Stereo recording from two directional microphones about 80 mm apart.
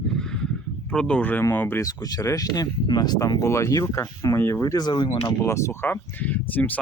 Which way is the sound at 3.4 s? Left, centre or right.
Left.